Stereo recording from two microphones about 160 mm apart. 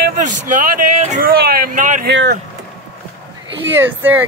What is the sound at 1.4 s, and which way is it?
Speech, 70° right (ahead or behind).